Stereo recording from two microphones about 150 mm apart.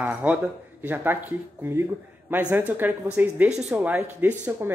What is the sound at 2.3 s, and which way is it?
Speech, 10° right (ahead or behind).